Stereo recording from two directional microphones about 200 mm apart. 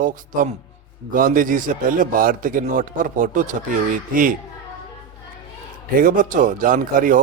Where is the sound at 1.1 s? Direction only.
45° right (ahead or behind).